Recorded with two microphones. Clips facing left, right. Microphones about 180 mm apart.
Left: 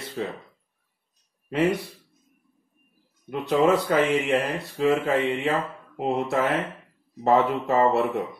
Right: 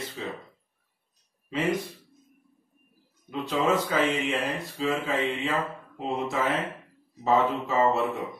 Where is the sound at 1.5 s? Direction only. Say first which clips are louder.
Left 5 dB; 60° left (ahead or behind).